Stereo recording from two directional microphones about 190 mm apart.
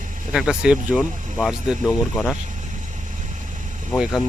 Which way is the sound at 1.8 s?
15° left (ahead or behind).